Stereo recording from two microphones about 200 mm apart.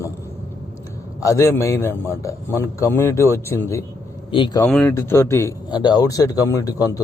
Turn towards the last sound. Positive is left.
turn(degrees=15)  # may be behind; listen again after turning